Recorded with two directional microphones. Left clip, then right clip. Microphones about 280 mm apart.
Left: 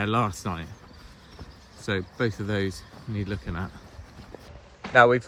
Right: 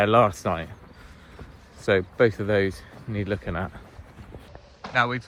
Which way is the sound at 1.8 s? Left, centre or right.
Centre.